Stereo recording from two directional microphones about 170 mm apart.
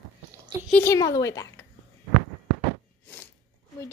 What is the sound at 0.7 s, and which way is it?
Speech, 15° left (ahead or behind).